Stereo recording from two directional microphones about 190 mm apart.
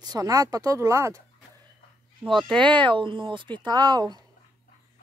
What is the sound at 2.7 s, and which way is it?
Speech, 25° right (ahead or behind).